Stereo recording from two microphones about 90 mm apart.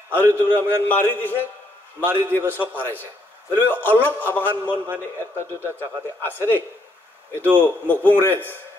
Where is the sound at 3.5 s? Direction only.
20° left (ahead or behind).